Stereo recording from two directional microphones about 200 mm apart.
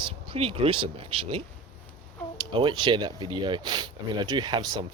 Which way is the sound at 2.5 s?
20° right (ahead or behind).